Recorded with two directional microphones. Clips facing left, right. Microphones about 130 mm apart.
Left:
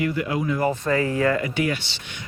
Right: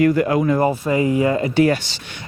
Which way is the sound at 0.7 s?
15° right (ahead or behind).